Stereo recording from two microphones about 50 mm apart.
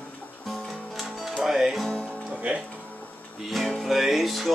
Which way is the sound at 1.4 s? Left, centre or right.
Centre.